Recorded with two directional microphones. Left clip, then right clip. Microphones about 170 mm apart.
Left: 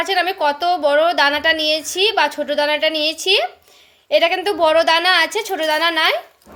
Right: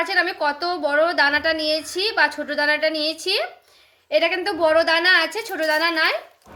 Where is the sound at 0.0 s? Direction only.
40° left (ahead or behind).